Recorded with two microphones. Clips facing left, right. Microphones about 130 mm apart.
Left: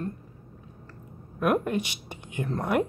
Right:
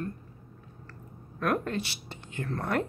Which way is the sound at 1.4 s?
15° left (ahead or behind).